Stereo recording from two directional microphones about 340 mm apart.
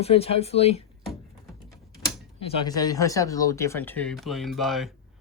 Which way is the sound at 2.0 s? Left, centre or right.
Centre.